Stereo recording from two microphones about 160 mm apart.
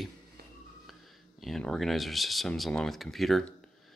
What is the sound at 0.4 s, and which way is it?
Music, 80° right.